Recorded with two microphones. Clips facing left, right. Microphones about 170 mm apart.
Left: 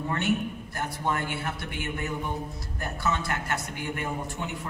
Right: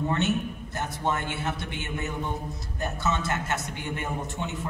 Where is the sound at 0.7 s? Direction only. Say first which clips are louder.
Right 1 dB; 20° right (ahead or behind).